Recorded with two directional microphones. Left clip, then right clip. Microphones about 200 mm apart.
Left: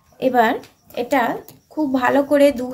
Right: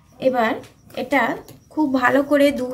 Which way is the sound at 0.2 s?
20° left (ahead or behind).